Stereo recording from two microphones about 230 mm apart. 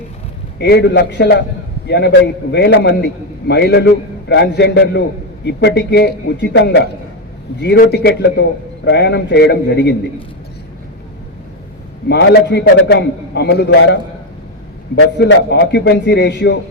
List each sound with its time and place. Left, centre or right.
0.6 s a man's voice: left
12.0 s a man's voice: left